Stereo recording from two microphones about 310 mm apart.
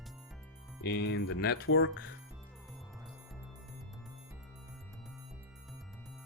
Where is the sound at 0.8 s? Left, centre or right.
Left.